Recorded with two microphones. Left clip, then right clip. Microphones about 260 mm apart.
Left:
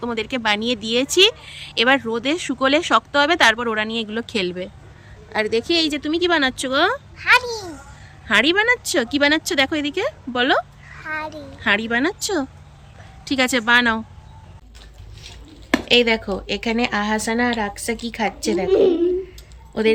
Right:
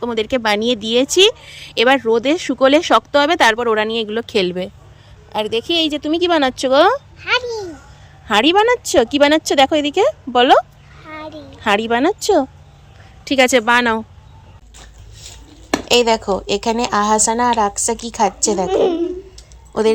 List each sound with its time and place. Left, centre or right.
0.0 s a woman's voice: right
7.2 s a sound: centre
8.3 s speech: centre
11.0 s a sound: centre
11.6 s speech: centre
15.7 s speech: centre